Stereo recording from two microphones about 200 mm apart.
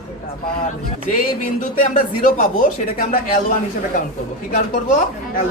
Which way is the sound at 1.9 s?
45° left (ahead or behind).